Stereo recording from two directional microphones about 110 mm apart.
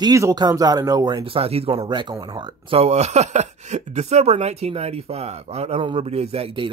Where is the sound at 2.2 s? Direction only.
40° right (ahead or behind).